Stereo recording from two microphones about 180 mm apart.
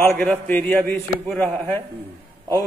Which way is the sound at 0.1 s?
5° left (ahead or behind).